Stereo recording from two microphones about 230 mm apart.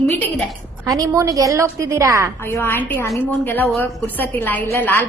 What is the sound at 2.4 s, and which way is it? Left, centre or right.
A woman's voice, centre.